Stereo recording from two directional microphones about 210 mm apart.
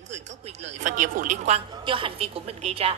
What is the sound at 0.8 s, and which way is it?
A woman's voice, 40° right (ahead or behind).